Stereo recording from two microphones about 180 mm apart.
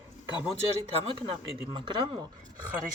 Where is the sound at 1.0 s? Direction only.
30° right (ahead or behind).